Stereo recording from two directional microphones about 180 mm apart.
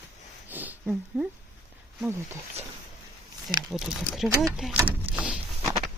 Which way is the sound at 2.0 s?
15° right (ahead or behind).